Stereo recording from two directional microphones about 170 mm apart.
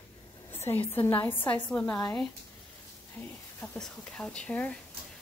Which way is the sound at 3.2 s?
15° left (ahead or behind).